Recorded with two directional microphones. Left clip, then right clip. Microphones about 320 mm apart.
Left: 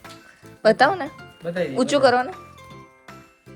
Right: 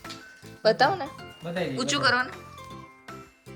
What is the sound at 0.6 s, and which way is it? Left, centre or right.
Speech, left.